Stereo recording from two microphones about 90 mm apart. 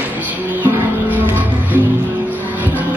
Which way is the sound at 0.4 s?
20° right (ahead or behind).